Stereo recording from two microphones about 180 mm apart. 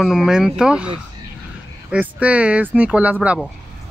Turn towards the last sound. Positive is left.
turn(degrees=-5)  # may be behind; listen again after turning